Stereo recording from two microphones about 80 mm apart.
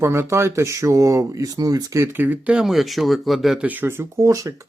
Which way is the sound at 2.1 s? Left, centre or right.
Right.